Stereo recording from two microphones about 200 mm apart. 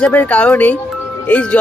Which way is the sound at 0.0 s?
5° left (ahead or behind).